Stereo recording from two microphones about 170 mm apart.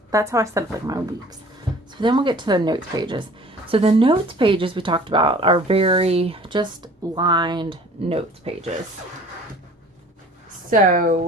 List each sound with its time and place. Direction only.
0.1 s a woman's voice: 20° right (ahead or behind); by 8.7 s 35° right (ahead or behind)
10.7 s speech: 55° right (ahead or behind)